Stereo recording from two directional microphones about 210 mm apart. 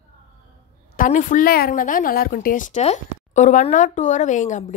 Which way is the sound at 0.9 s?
40° left (ahead or behind).